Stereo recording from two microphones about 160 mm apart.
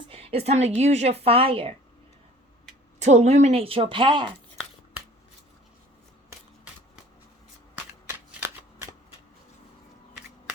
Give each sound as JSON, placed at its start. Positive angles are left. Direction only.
{"t": 0.1, "sound": "a sound", "side_deg": -35}
{"t": 0.8, "sound": "a woman's voice", "side_deg": -45}
{"t": 3.0, "sound": "a woman's voice", "side_deg": -45}
{"t": 8.0, "sound": "shuffling cards", "side_deg": -15}